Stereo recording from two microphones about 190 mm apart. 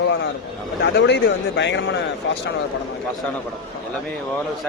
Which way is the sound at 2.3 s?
80° left.